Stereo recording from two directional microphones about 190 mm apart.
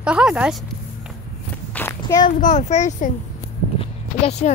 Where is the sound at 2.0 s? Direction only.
20° left (ahead or behind).